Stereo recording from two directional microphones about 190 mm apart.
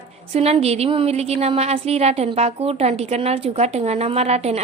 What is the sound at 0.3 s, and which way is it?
A woman's voice, 30° right (ahead or behind).